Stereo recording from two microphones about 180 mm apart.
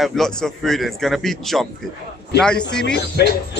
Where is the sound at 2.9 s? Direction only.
65° left (ahead or behind).